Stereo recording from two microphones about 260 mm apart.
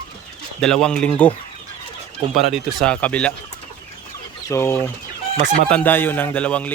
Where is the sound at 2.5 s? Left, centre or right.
Centre.